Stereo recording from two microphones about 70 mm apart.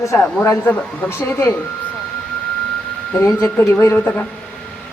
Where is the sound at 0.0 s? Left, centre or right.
Left.